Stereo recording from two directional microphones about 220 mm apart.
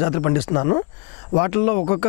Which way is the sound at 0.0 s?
20° left (ahead or behind).